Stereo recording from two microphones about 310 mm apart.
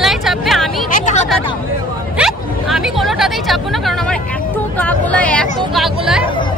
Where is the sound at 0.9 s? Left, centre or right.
Left.